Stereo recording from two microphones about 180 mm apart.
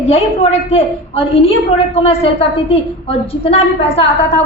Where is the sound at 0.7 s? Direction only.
35° left (ahead or behind).